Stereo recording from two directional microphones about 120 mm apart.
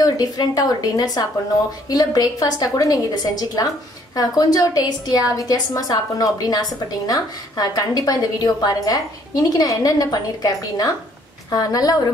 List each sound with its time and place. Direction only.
0.0 s a woman's voice: 30° left (ahead or behind)